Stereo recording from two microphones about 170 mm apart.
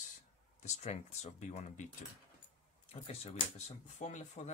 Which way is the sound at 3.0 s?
35° left (ahead or behind).